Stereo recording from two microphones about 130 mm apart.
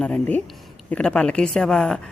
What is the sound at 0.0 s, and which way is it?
Speech, 10° left (ahead or behind).